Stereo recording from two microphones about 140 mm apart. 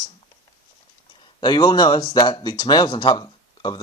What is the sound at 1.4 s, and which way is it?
Speech, 30° left (ahead or behind).